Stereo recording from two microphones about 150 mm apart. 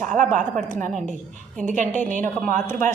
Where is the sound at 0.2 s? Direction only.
55° right (ahead or behind).